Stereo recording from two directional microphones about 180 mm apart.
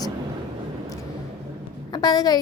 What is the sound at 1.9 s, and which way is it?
Speech, 20° left (ahead or behind).